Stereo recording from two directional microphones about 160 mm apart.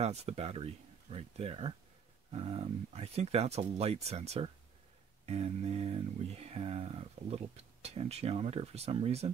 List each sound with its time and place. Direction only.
0.0 s speech: 40° right (ahead or behind)